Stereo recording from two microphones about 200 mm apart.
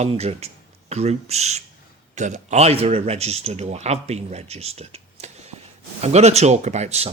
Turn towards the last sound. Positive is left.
turn(degrees=-30)  # may be behind; listen again after turning